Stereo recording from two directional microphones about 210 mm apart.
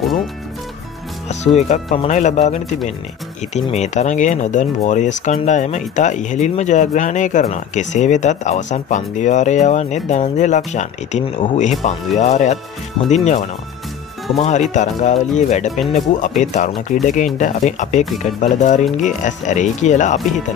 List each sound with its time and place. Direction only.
1.3 s speech: 35° left (ahead or behind)
15.7 s speech: centre (ahead or behind)
16.2 s speech: 35° left (ahead or behind)